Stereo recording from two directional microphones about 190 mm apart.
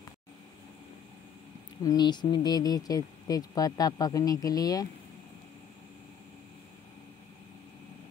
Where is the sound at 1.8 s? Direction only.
20° left (ahead or behind).